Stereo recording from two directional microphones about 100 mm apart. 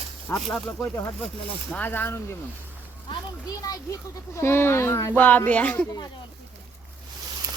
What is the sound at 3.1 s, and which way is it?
Speech, 40° left (ahead or behind).